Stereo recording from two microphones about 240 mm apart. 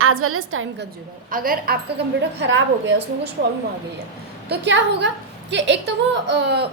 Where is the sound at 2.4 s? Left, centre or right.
Right.